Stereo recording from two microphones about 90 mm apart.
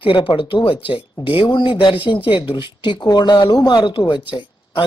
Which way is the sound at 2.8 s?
55° left (ahead or behind).